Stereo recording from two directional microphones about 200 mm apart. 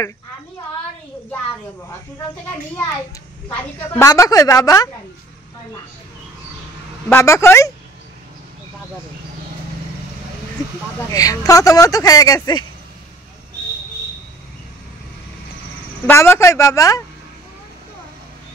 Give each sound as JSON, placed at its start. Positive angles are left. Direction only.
{"t": 3.5, "sound": "speech", "side_deg": 10}
{"t": 7.1, "sound": "speech", "side_deg": 15}
{"t": 11.1, "sound": "speech", "side_deg": 15}
{"t": 16.1, "sound": "speech", "side_deg": 15}